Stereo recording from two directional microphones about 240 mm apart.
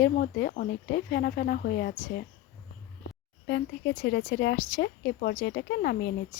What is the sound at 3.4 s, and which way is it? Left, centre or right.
Speech, left.